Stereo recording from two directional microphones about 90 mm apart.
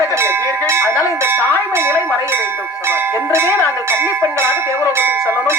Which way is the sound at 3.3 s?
25° right (ahead or behind).